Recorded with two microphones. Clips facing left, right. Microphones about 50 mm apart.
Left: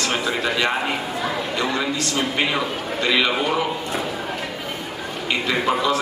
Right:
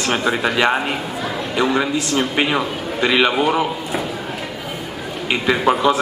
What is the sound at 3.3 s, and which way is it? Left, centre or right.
Speech, centre.